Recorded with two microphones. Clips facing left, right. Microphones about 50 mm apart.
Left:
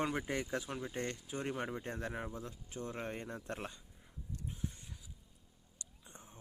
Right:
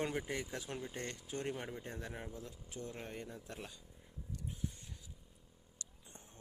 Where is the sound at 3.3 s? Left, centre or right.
Left.